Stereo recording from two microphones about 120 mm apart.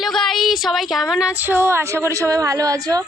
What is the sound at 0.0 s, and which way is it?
Speech, 5° left (ahead or behind).